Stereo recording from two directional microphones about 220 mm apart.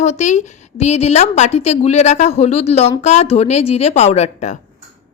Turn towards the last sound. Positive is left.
turn(degrees=30)  # may be behind; listen again after turning